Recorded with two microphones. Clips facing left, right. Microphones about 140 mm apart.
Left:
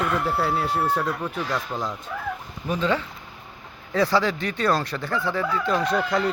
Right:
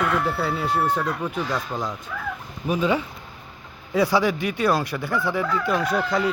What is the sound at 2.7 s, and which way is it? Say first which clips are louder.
Speech: right 2 dB; 10° right (ahead or behind).